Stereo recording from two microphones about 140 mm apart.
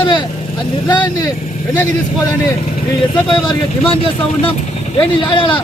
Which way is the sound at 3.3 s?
35° left (ahead or behind).